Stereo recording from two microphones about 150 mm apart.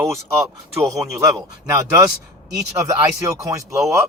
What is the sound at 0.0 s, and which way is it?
Speech, 20° right (ahead or behind).